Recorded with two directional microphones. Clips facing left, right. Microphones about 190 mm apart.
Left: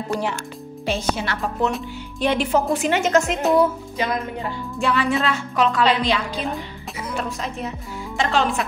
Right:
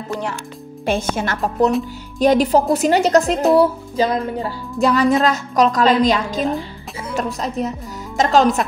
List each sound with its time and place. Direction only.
0.8 s a woman's voice: 50° right (ahead or behind)
2.1 s music: 40° right (ahead or behind)